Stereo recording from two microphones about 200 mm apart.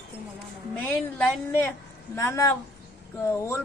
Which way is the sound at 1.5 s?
10° left (ahead or behind).